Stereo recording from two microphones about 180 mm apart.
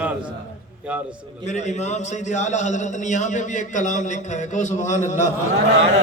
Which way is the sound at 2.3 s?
40° left (ahead or behind).